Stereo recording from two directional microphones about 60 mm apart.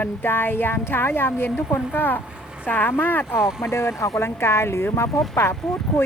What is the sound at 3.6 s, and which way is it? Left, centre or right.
Speech, left.